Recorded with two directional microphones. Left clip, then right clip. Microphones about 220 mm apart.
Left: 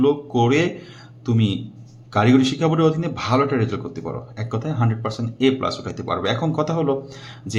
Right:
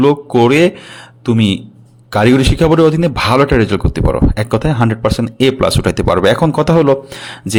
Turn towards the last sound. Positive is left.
turn(degrees=-45)  # may be behind; listen again after turning